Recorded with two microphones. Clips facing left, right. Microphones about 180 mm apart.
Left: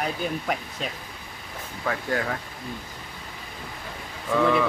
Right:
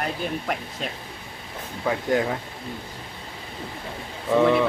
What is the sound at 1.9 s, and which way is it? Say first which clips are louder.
Speech: right 4 dB; 20° right (ahead or behind).